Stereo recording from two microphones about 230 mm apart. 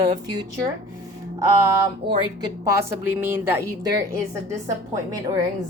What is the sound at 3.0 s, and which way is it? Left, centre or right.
A woman's voice, centre.